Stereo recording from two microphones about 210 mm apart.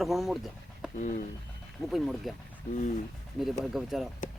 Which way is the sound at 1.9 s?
Centre (ahead or behind).